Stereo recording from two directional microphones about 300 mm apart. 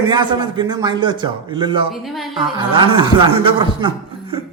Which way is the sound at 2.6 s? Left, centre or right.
Centre.